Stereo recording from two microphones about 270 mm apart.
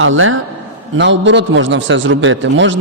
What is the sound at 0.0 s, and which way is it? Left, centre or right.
Speech, right.